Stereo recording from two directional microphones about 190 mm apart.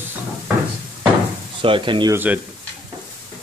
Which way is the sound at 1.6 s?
25° right (ahead or behind).